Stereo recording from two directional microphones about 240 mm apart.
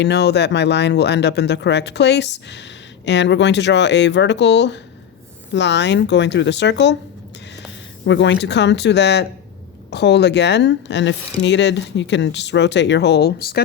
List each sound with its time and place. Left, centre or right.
0.0 s speech: left
8.0 s speech: left